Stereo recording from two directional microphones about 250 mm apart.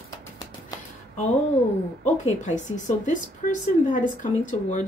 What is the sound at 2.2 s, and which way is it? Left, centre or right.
A woman's voice, left.